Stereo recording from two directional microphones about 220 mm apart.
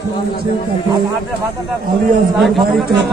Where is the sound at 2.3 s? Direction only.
Centre (ahead or behind).